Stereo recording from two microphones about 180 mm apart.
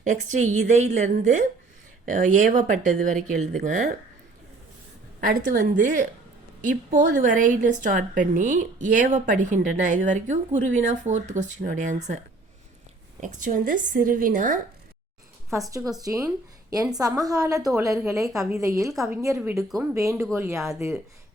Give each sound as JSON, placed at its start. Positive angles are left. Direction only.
{"t": 0.0, "sound": "a woman's voice", "side_deg": -40}
{"t": 5.2, "sound": "a woman's voice", "side_deg": -50}
{"t": 13.1, "sound": "a woman's voice", "side_deg": -45}
{"t": 15.5, "sound": "speech", "side_deg": -20}
{"t": 17.6, "sound": "a woman's voice", "side_deg": 0}
{"t": 18.0, "sound": "a woman's voice", "side_deg": -15}
{"t": 19.9, "sound": "a woman's voice", "side_deg": -15}